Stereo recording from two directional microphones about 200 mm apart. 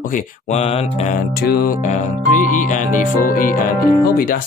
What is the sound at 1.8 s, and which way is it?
Music, 35° left (ahead or behind).